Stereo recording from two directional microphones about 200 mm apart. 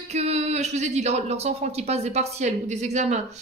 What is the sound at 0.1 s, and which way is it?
Speech, 35° right (ahead or behind).